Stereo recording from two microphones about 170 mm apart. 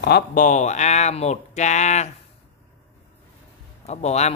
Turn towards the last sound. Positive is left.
turn(degrees=40)  # may be behind; listen again after turning